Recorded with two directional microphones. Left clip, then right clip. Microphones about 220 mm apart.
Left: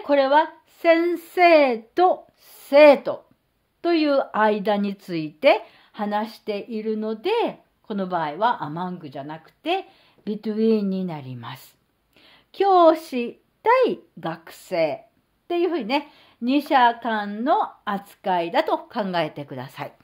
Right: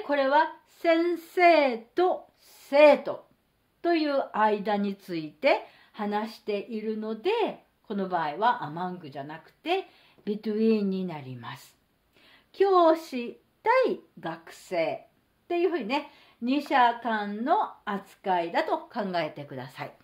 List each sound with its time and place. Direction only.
0.0 s a woman's voice: 35° left (ahead or behind)